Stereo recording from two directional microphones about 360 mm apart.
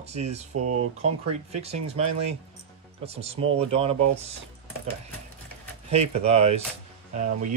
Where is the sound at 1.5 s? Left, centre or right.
Centre.